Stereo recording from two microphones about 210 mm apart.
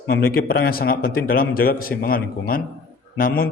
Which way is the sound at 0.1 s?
45° left (ahead or behind).